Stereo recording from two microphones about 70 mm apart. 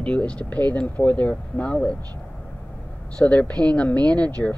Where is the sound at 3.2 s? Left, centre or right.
Centre.